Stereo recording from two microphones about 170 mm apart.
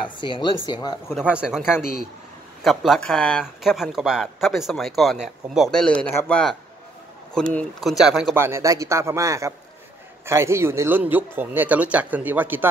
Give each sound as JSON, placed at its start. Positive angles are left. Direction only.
{"t": 0.2, "sound": "speech", "side_deg": 25}
{"t": 1.3, "sound": "speech", "side_deg": -5}
{"t": 8.4, "sound": "a man's voice", "side_deg": -15}